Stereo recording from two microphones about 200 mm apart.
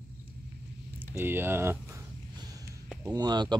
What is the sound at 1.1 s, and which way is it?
Speech, 10° right (ahead or behind).